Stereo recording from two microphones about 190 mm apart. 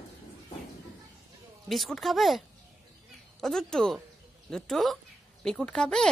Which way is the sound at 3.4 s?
Centre (ahead or behind).